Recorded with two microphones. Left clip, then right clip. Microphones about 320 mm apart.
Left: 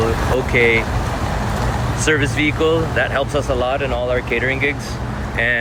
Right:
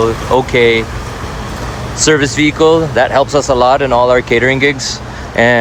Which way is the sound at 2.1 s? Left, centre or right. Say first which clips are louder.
Right 6 dB; right.